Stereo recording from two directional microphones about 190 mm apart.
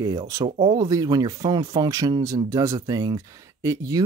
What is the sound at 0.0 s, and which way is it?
Speech, 15° right (ahead or behind).